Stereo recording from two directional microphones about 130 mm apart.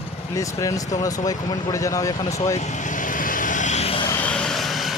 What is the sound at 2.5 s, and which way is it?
Vehicle, 65° left (ahead or behind).